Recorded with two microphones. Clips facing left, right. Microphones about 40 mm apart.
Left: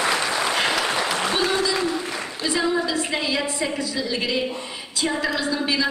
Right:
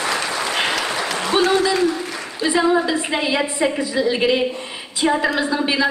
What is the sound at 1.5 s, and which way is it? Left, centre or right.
A man's voice, right.